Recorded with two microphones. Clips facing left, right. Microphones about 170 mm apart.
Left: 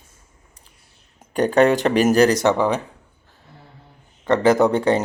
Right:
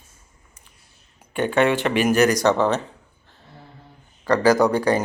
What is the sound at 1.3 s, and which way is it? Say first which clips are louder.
Speech: left 4 dB; 40° left (ahead or behind).